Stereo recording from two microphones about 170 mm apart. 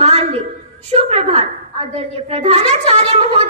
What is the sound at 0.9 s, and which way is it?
A woman's voice, 40° right (ahead or behind).